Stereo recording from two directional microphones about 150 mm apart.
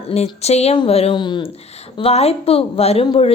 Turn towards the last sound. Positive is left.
turn(degrees=40)  # may be behind; listen again after turning